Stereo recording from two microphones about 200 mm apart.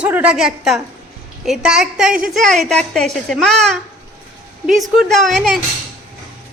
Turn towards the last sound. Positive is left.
turn(degrees=0)  # may be behind; listen again after turning